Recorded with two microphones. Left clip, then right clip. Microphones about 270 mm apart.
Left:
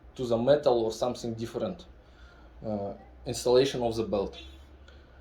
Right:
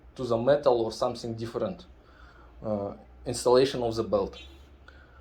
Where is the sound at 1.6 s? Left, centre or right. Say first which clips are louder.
Right 1 dB; right.